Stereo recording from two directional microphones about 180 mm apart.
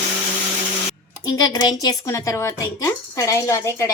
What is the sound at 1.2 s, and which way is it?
Speech, 20° left (ahead or behind).